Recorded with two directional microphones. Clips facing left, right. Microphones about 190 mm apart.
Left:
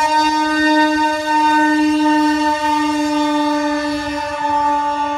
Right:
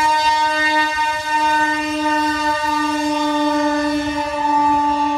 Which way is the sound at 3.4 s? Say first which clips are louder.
Even; 20° right (ahead or behind).